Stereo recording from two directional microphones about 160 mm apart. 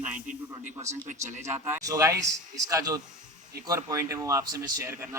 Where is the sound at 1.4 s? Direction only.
15° right (ahead or behind).